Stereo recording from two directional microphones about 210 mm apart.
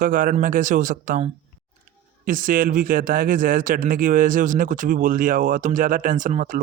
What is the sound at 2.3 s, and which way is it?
Speech, 40° right (ahead or behind).